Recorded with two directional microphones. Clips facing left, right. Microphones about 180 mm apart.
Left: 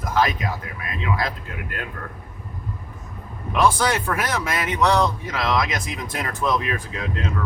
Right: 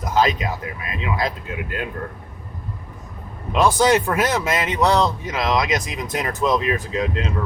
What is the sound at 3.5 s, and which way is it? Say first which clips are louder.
Speech: right 4 dB; 25° right (ahead or behind).